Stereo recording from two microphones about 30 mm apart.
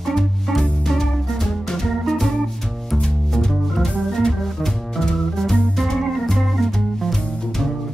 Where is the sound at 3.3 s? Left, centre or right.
Centre.